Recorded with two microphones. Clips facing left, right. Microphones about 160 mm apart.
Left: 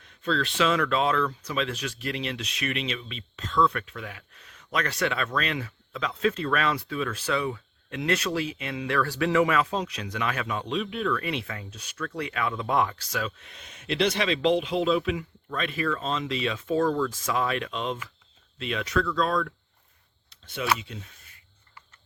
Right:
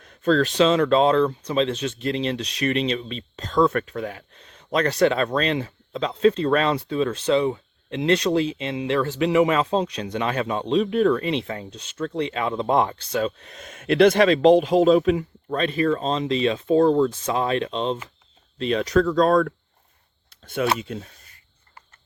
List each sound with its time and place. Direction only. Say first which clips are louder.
0.0 s speech: right 8 dB; 45° right (ahead or behind)
11.2 s speech: right 7 dB; 30° right (ahead or behind); by 21.1 s 50° right (ahead or behind)